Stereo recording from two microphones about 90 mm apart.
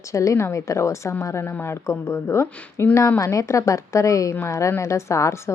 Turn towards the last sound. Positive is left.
turn(degrees=35)  # may be behind; listen again after turning